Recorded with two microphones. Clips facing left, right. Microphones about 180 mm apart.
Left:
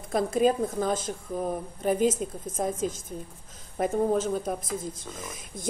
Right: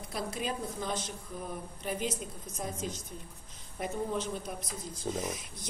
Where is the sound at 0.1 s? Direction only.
45° left (ahead or behind).